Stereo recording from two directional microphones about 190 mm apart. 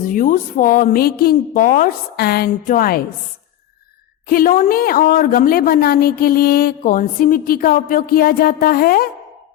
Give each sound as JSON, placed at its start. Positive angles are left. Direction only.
{"t": 0.0, "sound": "a woman's voice", "side_deg": 45}
{"t": 4.3, "sound": "a woman's voice", "side_deg": 50}